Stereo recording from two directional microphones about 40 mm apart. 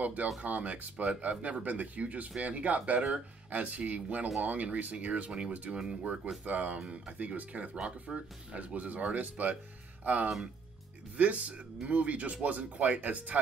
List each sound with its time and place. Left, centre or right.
0.0 s speech: right
6.4 s speech: right
8.1 s speech: centre
8.5 s speech: right